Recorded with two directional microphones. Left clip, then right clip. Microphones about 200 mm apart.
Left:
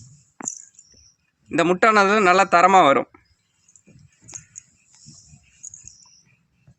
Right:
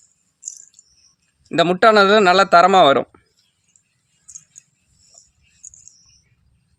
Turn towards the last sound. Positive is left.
turn(degrees=10)  # may be behind; listen again after turning